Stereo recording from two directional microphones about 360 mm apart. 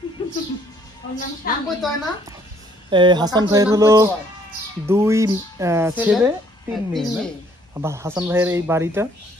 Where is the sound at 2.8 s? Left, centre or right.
Centre.